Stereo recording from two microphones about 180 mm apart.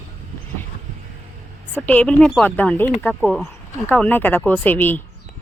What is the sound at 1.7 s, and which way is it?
A woman's voice, 10° left (ahead or behind).